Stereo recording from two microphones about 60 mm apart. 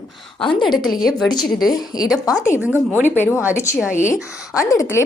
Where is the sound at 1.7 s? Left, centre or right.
Left.